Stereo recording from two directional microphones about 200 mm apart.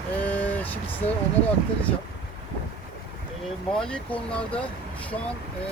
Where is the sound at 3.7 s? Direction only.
5° left (ahead or behind).